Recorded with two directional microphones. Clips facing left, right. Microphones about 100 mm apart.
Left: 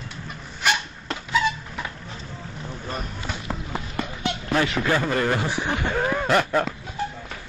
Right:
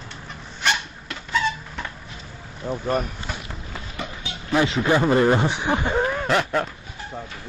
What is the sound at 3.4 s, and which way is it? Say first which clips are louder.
Clip-clop: left 5 dB; 70° left (ahead or behind).